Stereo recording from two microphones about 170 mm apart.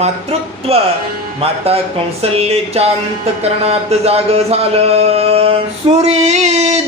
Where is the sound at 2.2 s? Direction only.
35° right (ahead or behind).